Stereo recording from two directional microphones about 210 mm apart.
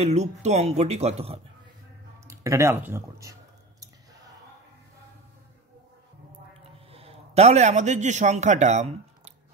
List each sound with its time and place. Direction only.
0.0 s speech: 30° right (ahead or behind)
2.2 s speech: 15° right (ahead or behind)
6.9 s a man's voice: 30° right (ahead or behind)